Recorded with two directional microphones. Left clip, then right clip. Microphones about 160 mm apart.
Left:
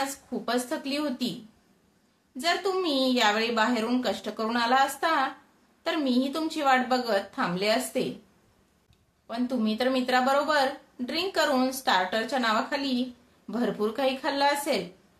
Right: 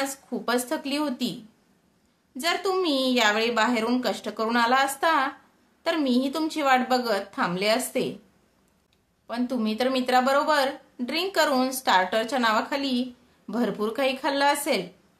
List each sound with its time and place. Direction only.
0.0 s a woman's voice: 35° right (ahead or behind)
2.3 s a woman's voice: 35° right (ahead or behind)
9.3 s a woman's voice: 35° right (ahead or behind)